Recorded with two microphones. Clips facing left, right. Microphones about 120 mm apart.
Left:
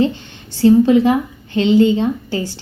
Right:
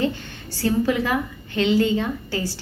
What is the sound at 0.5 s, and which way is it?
A woman's voice, 25° left (ahead or behind).